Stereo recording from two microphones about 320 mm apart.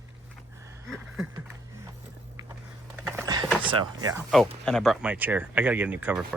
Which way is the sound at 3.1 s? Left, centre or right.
Centre.